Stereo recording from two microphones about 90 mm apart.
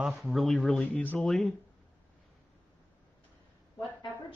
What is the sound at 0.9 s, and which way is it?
Speech, 20° left (ahead or behind).